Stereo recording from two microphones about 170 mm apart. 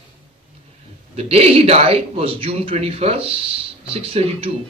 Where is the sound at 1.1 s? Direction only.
35° right (ahead or behind).